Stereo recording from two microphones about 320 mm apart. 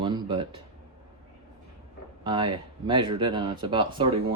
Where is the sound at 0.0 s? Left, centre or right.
Centre.